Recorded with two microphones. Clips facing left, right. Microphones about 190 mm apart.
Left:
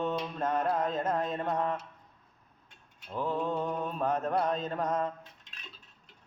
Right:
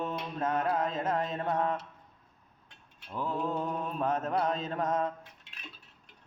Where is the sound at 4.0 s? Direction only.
Centre (ahead or behind).